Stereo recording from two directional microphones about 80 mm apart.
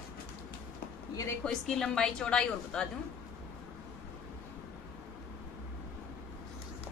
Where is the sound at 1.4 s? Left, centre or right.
Centre.